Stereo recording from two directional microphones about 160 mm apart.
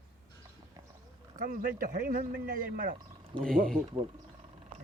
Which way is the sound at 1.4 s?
60° right (ahead or behind).